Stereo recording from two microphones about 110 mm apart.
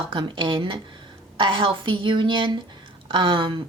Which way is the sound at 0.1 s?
50° right (ahead or behind).